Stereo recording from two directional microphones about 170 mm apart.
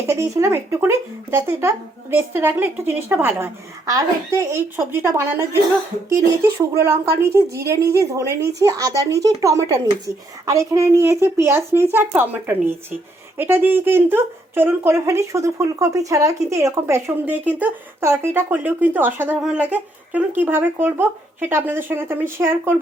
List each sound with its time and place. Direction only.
0.1 s speech: 15° right (ahead or behind)